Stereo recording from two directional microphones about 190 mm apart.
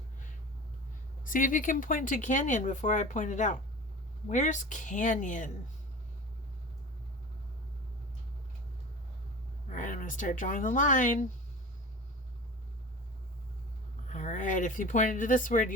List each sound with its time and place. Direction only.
1.2 s speech: 45° left (ahead or behind)
9.7 s speech: 45° left (ahead or behind)
14.1 s speech: 40° left (ahead or behind)